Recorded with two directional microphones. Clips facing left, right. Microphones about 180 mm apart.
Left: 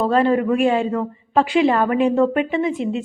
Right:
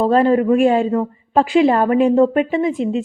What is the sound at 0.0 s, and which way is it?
A woman's voice, 35° right (ahead or behind).